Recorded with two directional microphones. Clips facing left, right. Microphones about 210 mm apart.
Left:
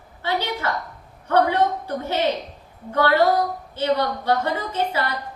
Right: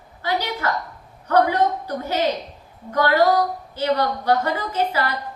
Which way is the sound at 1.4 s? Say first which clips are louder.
Even; 25° left (ahead or behind).